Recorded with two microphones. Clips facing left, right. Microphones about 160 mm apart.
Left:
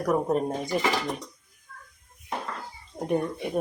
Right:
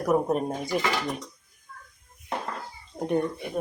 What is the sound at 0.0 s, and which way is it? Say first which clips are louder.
Speech: right 1 dB; 5° right (ahead or behind).